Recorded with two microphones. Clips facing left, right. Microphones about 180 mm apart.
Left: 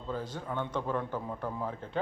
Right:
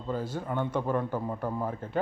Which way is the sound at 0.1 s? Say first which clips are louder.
Right 4 dB; 10° right (ahead or behind).